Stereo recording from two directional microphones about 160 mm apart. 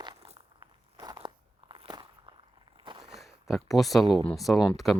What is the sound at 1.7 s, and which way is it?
Walk, 30° right (ahead or behind).